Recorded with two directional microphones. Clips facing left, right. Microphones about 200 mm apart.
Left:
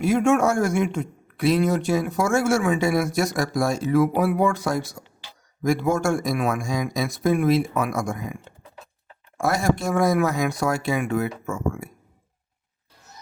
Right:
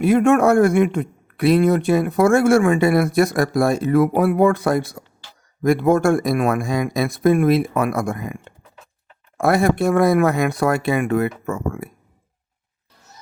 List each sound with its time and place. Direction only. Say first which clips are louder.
0.0 s speech: right 5 dB; 60° right (ahead or behind)